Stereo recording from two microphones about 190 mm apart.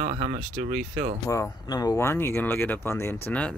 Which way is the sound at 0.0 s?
45° right (ahead or behind).